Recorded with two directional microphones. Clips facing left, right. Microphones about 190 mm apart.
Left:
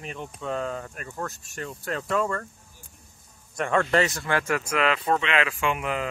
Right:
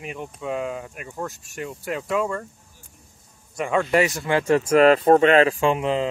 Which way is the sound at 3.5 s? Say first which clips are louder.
Right 2 dB; 5° right (ahead or behind).